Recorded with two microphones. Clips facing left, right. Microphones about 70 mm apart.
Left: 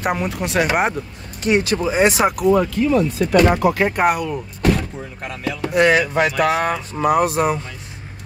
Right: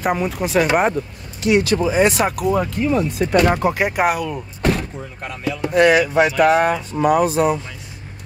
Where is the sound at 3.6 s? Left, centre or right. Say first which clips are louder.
Left 2 dB; centre.